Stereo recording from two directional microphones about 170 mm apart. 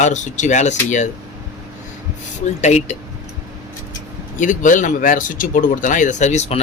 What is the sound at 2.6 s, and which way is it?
Speech, 40° left (ahead or behind).